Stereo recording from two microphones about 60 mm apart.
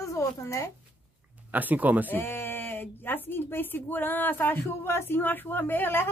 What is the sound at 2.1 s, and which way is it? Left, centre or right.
Speech, left.